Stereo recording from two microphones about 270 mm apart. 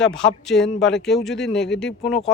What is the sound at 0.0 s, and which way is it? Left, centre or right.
Speech, centre.